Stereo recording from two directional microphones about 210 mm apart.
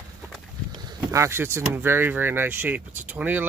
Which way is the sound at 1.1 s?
10° right (ahead or behind).